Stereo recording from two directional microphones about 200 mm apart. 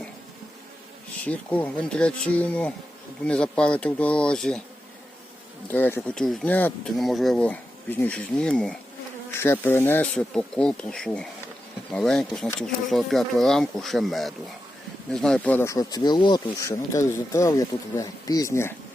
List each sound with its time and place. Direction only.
1.2 s speech: 5° left (ahead or behind)
5.6 s speech: 10° left (ahead or behind)